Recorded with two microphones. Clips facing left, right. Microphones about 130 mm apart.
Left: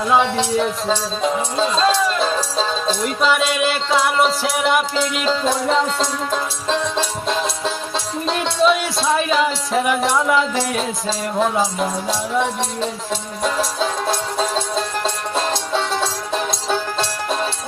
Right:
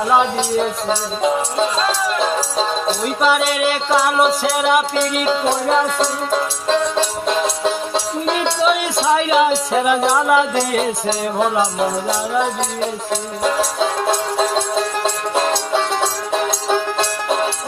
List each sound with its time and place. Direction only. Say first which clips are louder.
0.0 s music: right 1 dB; 5° right (ahead or behind)
13.7 s music: right 3 dB; 20° right (ahead or behind)
15.9 s music: right 2 dB; 20° right (ahead or behind)